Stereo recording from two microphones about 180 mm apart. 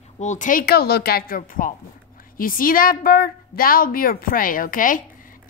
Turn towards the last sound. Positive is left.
turn(degrees=50)  # may be behind; listen again after turning